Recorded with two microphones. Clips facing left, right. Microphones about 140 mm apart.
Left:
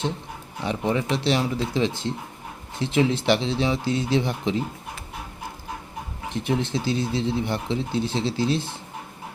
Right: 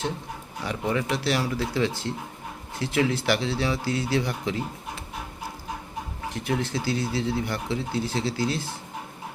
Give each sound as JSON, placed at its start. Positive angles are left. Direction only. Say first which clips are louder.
{"t": 0.6, "sound": "speech", "louder": "left 3 dB", "side_deg": 20}
{"t": 6.3, "sound": "speech", "louder": "left 3 dB", "side_deg": 25}